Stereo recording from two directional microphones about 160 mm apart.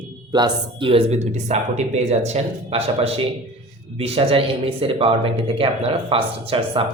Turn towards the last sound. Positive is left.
turn(degrees=-35)  # may be behind; listen again after turning